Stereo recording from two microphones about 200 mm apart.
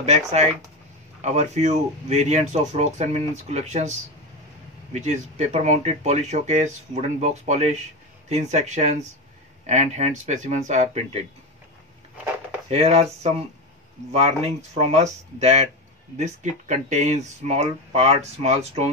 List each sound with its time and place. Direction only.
0.0 s speech: 35° right (ahead or behind)
12.6 s speech: 30° right (ahead or behind)